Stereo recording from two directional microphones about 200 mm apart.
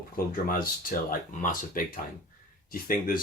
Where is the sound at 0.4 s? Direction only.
45° left (ahead or behind).